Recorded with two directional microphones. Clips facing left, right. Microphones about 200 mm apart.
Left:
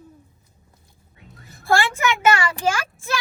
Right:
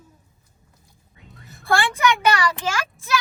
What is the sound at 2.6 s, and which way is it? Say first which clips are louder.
Speech: left 4 dB; 50° left (ahead or behind).